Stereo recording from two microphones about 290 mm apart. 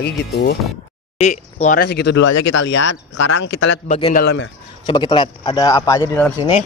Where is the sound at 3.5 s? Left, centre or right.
Left.